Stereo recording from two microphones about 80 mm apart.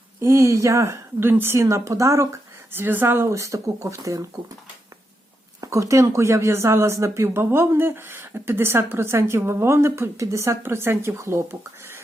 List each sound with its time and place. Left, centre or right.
0.2 s speech: right
1.2 s speech: right
1.5 s speech: right
2.7 s speech: right
5.5 s speech: right